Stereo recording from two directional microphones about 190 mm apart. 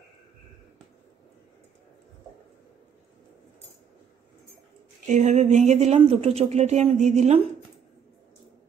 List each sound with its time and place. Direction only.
5.0 s speech: 40° right (ahead or behind)